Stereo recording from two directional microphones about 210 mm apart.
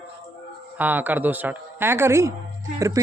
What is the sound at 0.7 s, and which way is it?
A woman's voice, 10° right (ahead or behind).